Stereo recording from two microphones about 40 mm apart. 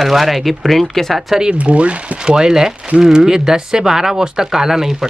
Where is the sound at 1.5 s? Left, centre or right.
Right.